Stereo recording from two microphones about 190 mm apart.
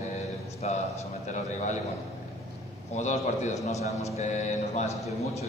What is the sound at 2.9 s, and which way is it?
A man's voice, 40° left (ahead or behind).